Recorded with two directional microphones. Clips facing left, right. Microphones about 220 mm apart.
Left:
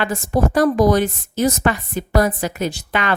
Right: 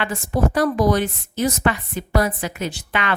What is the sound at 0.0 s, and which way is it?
A woman's voice, 40° left (ahead or behind).